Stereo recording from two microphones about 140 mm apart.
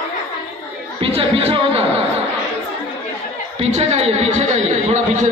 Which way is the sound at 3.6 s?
50° right (ahead or behind).